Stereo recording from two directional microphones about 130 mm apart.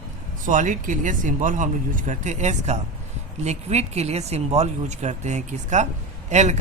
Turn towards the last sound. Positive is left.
turn(degrees=-65)  # may be behind; listen again after turning